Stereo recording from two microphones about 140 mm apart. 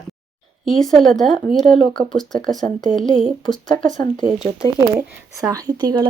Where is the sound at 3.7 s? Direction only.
70° right (ahead or behind).